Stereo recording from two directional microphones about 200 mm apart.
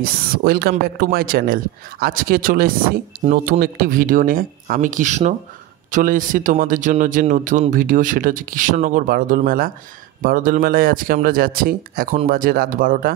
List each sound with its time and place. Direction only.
0.0 s speech: 50° right (ahead or behind)